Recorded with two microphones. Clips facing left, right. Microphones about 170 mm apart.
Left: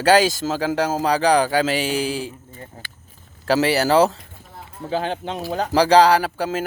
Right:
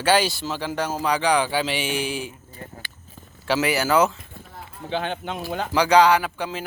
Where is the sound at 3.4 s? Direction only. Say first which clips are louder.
Left 4 dB; 35° left (ahead or behind).